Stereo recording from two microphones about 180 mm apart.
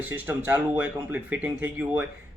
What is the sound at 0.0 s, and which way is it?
Speech, 10° right (ahead or behind).